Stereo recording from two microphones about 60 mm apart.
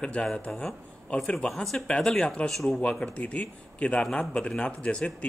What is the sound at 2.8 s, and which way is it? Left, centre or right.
Speech, centre.